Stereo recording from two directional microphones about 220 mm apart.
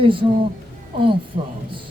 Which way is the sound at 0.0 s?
25° right (ahead or behind).